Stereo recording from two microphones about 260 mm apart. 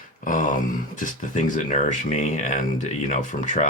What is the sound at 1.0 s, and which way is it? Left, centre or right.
Speech, left.